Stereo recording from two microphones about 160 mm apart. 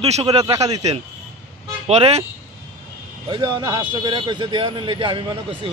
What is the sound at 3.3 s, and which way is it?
Speech, 30° right (ahead or behind).